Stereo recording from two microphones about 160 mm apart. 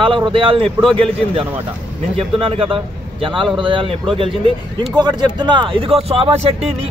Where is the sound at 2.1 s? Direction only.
35° right (ahead or behind).